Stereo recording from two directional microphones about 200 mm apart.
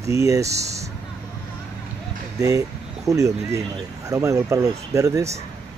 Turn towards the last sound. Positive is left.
turn(degrees=-15)  # may be behind; listen again after turning